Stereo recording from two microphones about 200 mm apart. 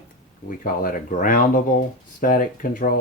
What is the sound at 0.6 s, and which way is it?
Speech, 45° left (ahead or behind).